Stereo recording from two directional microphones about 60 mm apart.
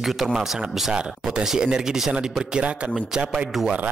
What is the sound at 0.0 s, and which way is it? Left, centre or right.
Speech, centre.